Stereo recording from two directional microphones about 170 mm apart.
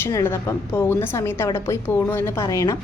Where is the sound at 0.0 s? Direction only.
15° left (ahead or behind).